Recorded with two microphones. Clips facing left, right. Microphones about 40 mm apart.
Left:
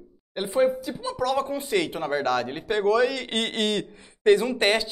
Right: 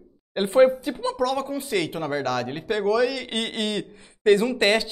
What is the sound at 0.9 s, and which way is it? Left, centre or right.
Speech, right.